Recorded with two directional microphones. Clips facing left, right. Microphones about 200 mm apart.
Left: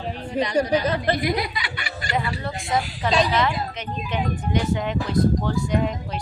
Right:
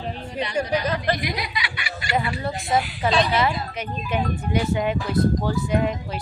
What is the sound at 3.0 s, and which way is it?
Speech, 10° right (ahead or behind).